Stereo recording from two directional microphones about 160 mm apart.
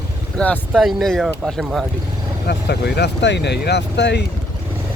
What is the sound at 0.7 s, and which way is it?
Speech, centre (ahead or behind).